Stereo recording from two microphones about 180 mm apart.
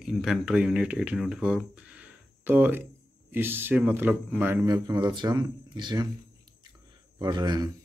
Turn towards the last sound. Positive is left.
turn(degrees=-25)  # may be behind; listen again after turning